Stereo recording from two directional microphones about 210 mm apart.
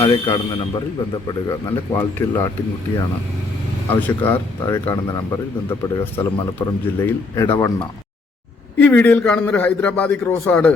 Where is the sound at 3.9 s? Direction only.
10° left (ahead or behind).